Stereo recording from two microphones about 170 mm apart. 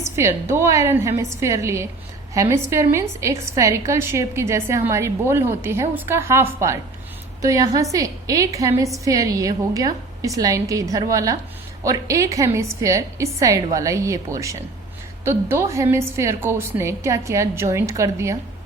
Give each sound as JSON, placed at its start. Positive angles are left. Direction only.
{"t": 0.0, "sound": "a woman's voice", "side_deg": -15}